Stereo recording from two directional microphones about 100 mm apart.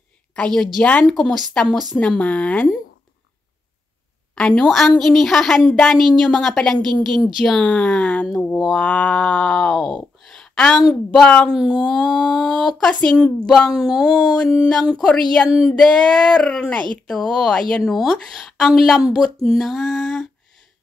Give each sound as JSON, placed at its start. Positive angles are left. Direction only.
{"t": 0.4, "sound": "a woman's voice", "side_deg": 5}
{"t": 4.4, "sound": "a woman's voice", "side_deg": 10}